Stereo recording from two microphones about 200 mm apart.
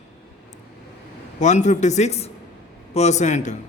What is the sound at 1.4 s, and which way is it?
A man's voice, 35° left (ahead or behind).